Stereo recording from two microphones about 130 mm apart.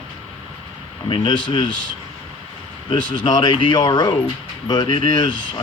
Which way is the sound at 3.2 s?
35° left (ahead or behind).